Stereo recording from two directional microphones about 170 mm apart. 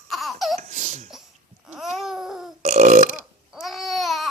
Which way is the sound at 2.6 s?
45° right (ahead or behind).